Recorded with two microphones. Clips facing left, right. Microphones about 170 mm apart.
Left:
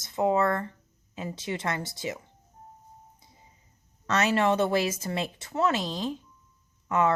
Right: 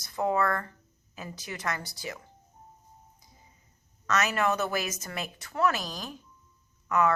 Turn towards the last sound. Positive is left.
turn(degrees=25)  # may be behind; listen again after turning